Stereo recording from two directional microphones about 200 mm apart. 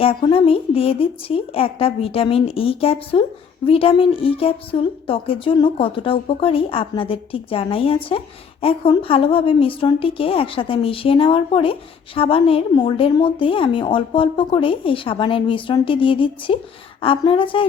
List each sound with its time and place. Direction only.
0.0 s a woman's voice: 25° left (ahead or behind)